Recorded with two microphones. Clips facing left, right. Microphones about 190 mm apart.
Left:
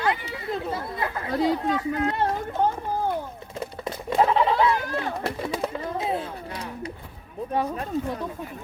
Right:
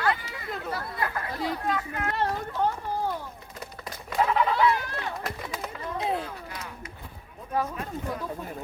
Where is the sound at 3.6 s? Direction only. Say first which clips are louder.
Left 9 dB; 30° left (ahead or behind).